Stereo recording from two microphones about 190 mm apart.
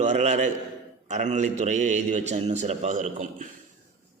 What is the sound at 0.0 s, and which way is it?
Speech, 35° right (ahead or behind).